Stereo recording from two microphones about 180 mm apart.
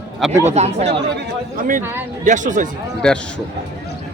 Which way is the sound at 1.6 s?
50° right (ahead or behind).